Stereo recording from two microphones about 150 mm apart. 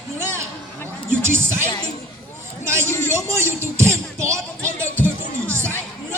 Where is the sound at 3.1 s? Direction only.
15° right (ahead or behind).